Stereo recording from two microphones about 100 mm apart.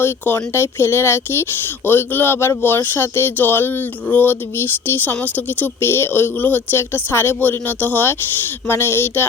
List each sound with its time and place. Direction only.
0.0 s speech: 20° left (ahead or behind)